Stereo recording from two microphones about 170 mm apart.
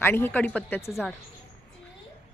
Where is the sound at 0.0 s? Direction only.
10° left (ahead or behind).